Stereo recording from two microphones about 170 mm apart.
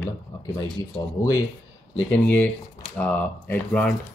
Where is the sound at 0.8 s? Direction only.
20° left (ahead or behind).